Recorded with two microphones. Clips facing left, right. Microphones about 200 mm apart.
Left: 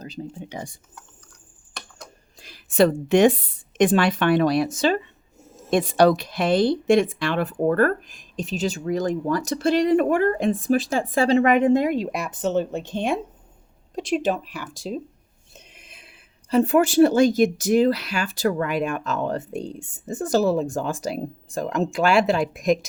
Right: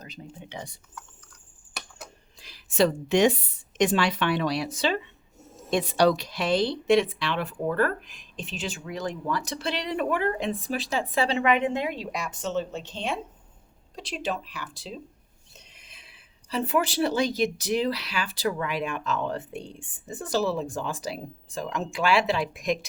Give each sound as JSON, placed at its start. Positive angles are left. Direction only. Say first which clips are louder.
{"t": 0.0, "sound": "a woman's voice", "louder": "left 9 dB", "side_deg": 35}
{"t": 2.4, "sound": "a woman's voice", "louder": "left 5 dB", "side_deg": 55}